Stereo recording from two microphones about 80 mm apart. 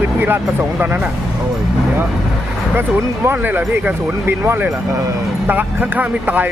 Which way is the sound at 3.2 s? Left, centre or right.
Right.